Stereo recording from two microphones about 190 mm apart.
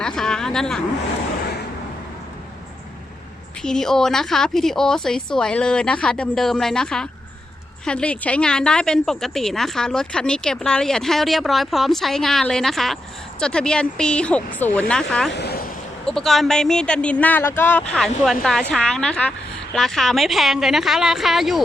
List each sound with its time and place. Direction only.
0.0 s a sound: 5° left (ahead or behind)
3.6 s a woman's voice: 5° left (ahead or behind)
15.3 s speech: 60° left (ahead or behind)
16.0 s a woman's voice: centre (ahead or behind)